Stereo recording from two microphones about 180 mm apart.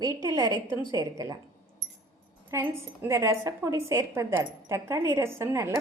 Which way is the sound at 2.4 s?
15° right (ahead or behind).